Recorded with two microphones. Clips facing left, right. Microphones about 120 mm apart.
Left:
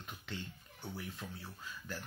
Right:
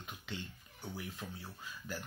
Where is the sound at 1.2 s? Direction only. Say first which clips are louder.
Right 1 dB; centre (ahead or behind).